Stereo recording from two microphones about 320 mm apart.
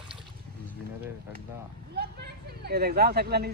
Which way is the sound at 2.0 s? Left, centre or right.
Right.